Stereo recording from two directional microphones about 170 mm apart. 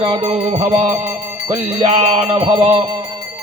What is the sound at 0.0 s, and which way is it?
Music, 35° right (ahead or behind).